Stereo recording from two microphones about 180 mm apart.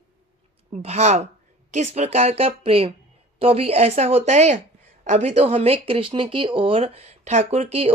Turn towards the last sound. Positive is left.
turn(degrees=-35)  # may be behind; listen again after turning